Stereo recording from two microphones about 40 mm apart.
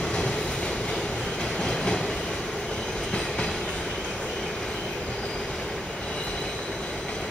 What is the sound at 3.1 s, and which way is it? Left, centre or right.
Train, centre.